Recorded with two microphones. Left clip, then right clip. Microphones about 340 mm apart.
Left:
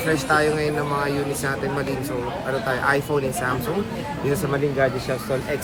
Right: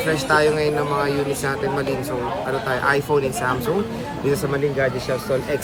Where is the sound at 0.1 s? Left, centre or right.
Centre.